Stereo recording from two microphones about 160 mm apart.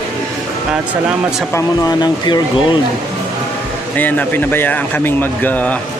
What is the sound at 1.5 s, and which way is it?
Speech, 25° left (ahead or behind).